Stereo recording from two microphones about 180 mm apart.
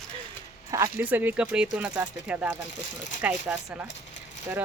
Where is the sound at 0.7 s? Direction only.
15° right (ahead or behind).